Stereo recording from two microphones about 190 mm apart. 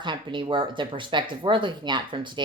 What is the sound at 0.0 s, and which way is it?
Speech, 25° right (ahead or behind).